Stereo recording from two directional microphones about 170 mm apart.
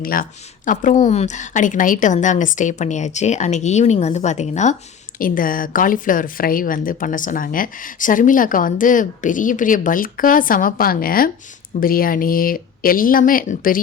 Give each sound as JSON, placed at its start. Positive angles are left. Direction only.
{"t": 0.0, "sound": "speech", "side_deg": 55}
{"t": 5.2, "sound": "speech", "side_deg": 55}